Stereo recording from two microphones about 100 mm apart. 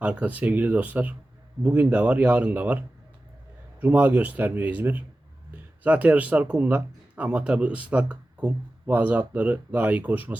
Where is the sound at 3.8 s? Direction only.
20° right (ahead or behind).